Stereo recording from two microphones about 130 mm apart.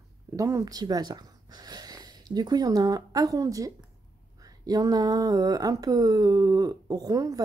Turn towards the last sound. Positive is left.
turn(degrees=-25)  # may be behind; listen again after turning